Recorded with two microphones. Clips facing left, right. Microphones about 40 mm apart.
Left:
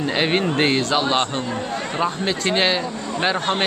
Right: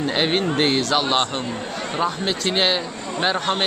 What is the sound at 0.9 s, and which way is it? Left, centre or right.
Speech, centre.